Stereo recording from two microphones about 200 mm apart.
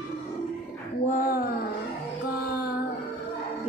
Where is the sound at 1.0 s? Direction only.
40° left (ahead or behind).